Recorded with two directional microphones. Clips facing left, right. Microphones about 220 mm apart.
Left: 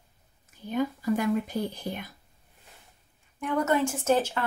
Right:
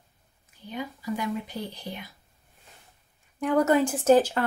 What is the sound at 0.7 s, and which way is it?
Speech, 50° left (ahead or behind).